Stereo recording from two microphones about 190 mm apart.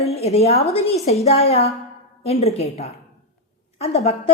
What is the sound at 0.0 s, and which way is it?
A woman's voice, 35° left (ahead or behind).